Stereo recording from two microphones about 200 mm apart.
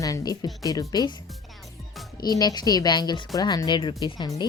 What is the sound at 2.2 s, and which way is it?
A woman's voice, 20° left (ahead or behind).